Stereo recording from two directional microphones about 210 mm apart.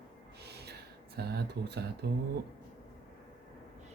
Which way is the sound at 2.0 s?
50° right (ahead or behind).